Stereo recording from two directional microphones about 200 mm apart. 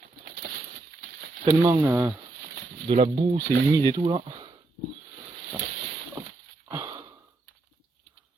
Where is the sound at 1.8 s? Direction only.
15° right (ahead or behind).